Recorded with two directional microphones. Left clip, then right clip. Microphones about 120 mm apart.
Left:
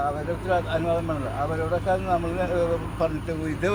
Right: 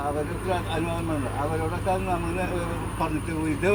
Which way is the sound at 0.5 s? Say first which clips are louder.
Left 5 dB; 30° left (ahead or behind).